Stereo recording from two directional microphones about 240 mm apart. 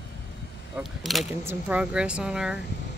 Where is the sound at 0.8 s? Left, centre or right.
Centre.